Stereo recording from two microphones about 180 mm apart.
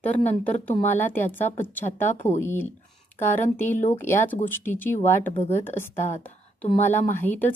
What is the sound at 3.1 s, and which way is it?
Speech, 10° left (ahead or behind).